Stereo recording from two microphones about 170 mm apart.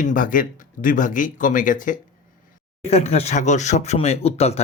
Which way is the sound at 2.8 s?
40° left (ahead or behind).